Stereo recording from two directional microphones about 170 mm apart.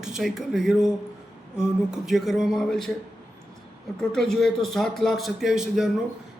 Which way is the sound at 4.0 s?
5° left (ahead or behind).